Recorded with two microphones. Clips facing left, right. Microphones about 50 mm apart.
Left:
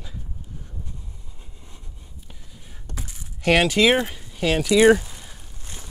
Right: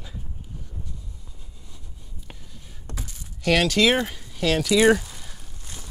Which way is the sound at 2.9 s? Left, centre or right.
Centre.